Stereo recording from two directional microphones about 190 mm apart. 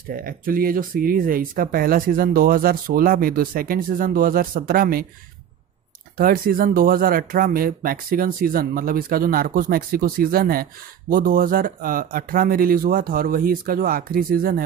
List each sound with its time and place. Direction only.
0.1 s speech: 50° right (ahead or behind)
6.1 s speech: 50° right (ahead or behind)